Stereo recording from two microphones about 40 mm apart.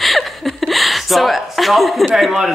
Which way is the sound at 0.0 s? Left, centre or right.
Centre.